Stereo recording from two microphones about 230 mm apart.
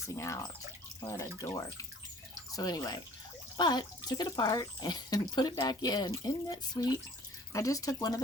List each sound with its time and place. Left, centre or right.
0.2 s speech: centre